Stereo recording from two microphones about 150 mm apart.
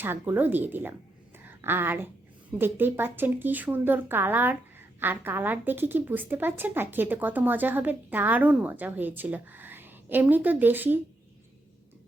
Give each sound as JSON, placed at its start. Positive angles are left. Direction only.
{"t": 0.0, "sound": "a woman's voice", "side_deg": -15}